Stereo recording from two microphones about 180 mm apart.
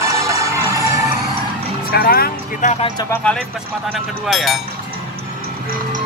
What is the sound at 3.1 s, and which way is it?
Speech, 5° left (ahead or behind).